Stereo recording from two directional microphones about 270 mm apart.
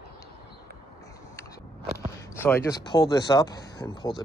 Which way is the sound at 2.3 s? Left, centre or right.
Centre.